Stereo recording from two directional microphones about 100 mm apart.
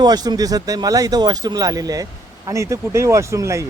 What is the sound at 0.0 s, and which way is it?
Speech, 45° right (ahead or behind).